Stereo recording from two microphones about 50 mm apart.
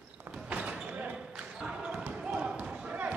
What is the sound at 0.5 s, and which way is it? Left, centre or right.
Basketball bounce, right.